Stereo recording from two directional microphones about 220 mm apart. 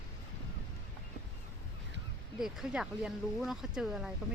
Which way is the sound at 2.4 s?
Centre (ahead or behind).